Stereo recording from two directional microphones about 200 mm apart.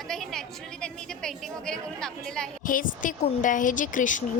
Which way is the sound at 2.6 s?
40° left (ahead or behind).